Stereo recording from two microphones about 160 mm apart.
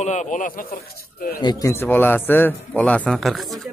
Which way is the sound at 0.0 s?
45° left (ahead or behind).